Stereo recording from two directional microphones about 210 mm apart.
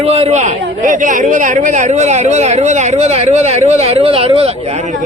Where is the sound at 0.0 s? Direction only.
30° right (ahead or behind).